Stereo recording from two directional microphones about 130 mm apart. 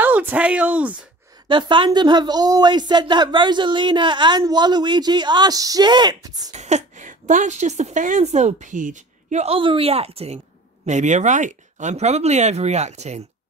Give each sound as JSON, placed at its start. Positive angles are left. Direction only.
{"t": 0.0, "sound": "speech", "side_deg": -15}
{"t": 1.5, "sound": "speech", "side_deg": -40}
{"t": 6.5, "sound": "a woman's voice", "side_deg": -60}
{"t": 9.6, "sound": "speech", "side_deg": -45}
{"t": 10.9, "sound": "speech", "side_deg": -65}